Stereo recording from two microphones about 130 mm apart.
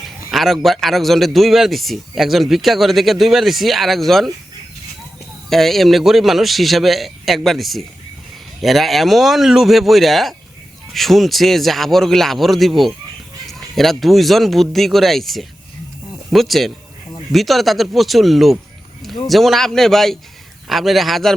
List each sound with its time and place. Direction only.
0.3 s a man's voice: centre (ahead or behind)
5.5 s a man's voice: centre (ahead or behind)